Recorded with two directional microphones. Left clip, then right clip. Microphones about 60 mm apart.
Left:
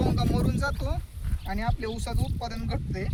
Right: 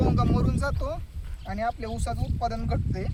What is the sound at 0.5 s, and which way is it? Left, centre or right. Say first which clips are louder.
Speech: right 1 dB; right.